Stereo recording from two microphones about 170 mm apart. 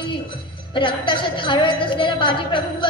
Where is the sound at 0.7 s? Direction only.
30° left (ahead or behind).